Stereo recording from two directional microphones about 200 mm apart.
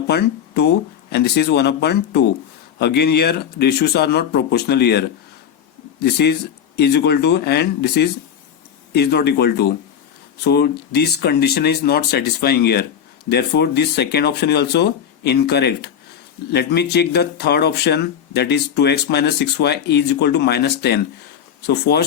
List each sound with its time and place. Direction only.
0.1 s speech: 55° left (ahead or behind)